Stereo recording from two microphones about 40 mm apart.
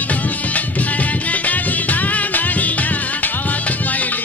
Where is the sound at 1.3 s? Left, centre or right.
Left.